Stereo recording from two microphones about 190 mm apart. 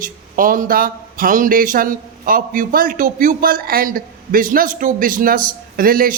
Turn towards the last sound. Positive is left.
turn(degrees=-50)  # may be behind; listen again after turning